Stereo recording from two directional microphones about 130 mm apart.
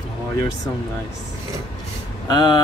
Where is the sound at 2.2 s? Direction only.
35° left (ahead or behind).